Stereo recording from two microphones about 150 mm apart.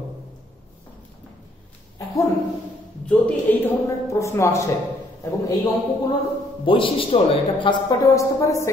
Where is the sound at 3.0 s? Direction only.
10° left (ahead or behind).